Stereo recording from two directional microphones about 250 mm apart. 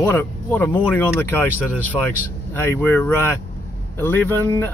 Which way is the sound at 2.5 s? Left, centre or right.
Centre.